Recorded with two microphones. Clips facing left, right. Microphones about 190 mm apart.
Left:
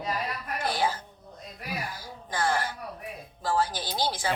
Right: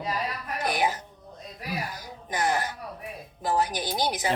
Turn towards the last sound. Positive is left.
turn(degrees=-20)  # may be behind; listen again after turning